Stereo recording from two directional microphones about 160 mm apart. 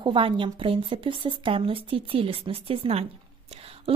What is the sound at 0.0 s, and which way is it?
A woman's voice, 30° right (ahead or behind).